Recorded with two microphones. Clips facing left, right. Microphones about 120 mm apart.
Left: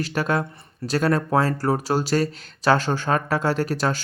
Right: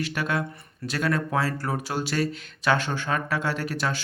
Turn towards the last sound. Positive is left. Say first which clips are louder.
# left 5 dB
turn(degrees=40)  # may be behind; listen again after turning